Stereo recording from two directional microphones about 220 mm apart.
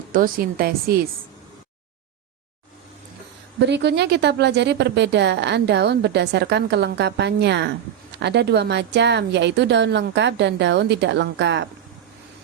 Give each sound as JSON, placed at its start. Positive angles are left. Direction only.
{"t": 0.1, "sound": "speech", "side_deg": -40}
{"t": 3.7, "sound": "a woman's voice", "side_deg": -50}